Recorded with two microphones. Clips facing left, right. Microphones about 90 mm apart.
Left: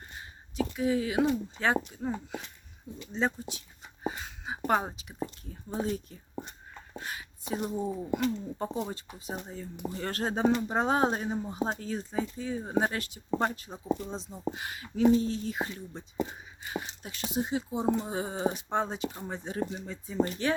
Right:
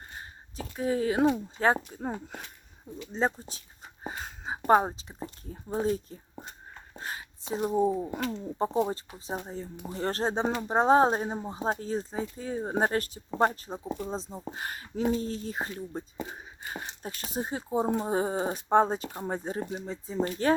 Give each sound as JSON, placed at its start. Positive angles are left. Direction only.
{"t": 0.2, "sound": "speech", "side_deg": -40}
{"t": 7.0, "sound": "a sound", "side_deg": -35}
{"t": 7.7, "sound": "speech", "side_deg": -35}